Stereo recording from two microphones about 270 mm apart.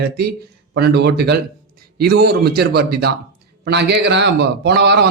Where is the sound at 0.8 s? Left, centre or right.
Right.